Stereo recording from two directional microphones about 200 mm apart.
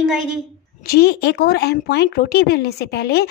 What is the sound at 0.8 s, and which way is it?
Speech, 55° left (ahead or behind).